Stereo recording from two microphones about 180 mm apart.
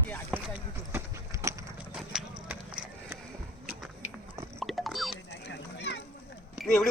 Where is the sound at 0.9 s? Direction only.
15° right (ahead or behind).